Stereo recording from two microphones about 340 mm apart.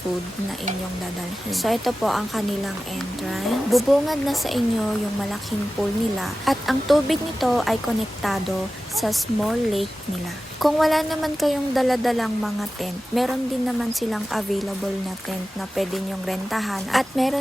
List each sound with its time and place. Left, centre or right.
1.6 s speech: centre
6.1 s speech: centre
15.7 s speech: centre